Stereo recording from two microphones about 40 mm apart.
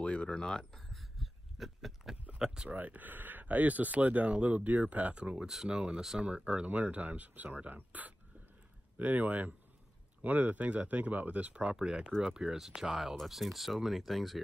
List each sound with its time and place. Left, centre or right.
0.0 s speech: left; by 1.0 s centre
1.1 s a sound: centre
2.3 s speech: centre
2.7 s speech: right
5.7 s speech: centre
6.1 s speech: right
12.5 s speech: centre